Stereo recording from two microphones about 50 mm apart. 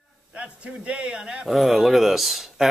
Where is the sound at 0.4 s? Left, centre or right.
Right.